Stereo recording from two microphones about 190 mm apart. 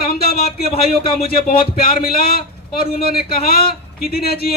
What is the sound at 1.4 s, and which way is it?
A man's voice, 50° left (ahead or behind).